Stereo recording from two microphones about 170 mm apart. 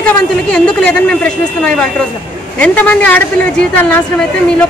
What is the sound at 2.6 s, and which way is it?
A man's voice, 10° left (ahead or behind).